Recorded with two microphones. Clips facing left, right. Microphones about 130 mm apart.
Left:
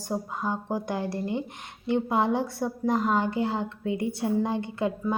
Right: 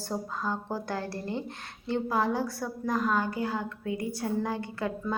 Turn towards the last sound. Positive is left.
turn(degrees=20)  # may be behind; listen again after turning